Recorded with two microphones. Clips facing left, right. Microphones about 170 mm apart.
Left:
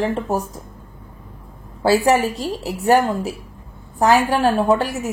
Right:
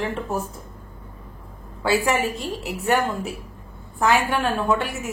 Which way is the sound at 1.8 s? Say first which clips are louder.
Left 6 dB; 40° left (ahead or behind).